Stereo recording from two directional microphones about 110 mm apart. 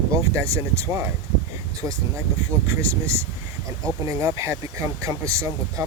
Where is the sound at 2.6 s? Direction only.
25° right (ahead or behind).